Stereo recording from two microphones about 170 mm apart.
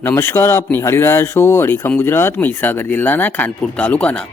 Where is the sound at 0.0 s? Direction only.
15° left (ahead or behind).